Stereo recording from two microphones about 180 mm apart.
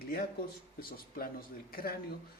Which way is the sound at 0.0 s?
55° left (ahead or behind).